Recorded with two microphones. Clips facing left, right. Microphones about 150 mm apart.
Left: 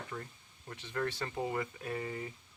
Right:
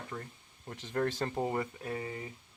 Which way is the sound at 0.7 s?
45° right (ahead or behind).